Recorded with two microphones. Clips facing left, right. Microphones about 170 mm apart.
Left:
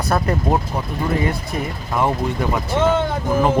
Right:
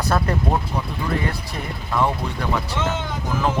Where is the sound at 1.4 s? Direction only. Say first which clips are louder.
Left 5 dB; 20° left (ahead or behind).